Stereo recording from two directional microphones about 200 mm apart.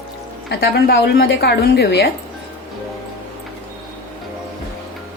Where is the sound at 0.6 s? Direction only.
50° left (ahead or behind).